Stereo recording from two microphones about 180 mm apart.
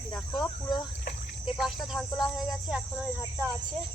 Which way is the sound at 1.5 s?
Centre (ahead or behind).